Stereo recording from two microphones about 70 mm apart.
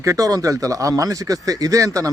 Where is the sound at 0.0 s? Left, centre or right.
Right.